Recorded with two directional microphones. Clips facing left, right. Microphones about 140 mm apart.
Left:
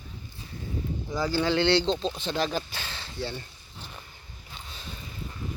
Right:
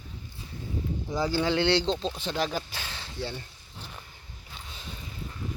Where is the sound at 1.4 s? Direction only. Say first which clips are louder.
Left 2 dB; 10° right (ahead or behind).